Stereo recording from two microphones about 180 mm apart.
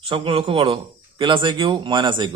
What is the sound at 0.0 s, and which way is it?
A man's voice, 30° right (ahead or behind).